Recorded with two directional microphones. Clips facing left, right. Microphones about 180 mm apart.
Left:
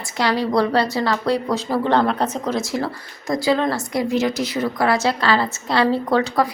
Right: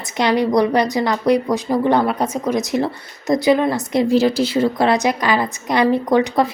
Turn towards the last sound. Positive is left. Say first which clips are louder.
# right 3 dB
turn(degrees=-20)  # may be behind; listen again after turning